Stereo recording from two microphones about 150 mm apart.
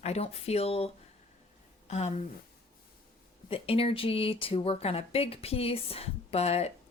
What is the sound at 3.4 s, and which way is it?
Speech, 40° left (ahead or behind).